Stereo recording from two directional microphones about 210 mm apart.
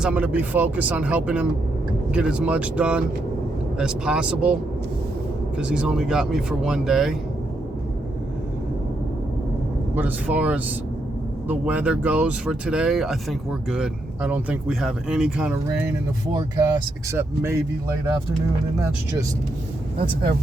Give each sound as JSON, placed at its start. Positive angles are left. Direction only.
{"t": 0.0, "sound": "speech", "side_deg": -5}
{"t": 5.5, "sound": "speech", "side_deg": -5}
{"t": 9.9, "sound": "speech", "side_deg": -10}